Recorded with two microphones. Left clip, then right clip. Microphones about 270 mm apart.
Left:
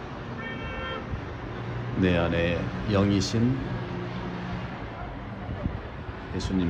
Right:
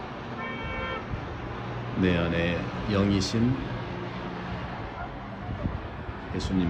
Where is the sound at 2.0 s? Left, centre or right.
Centre.